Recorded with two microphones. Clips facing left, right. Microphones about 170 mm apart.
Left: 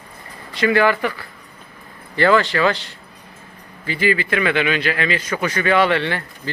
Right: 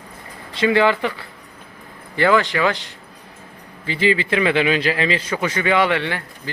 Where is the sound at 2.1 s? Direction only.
15° right (ahead or behind).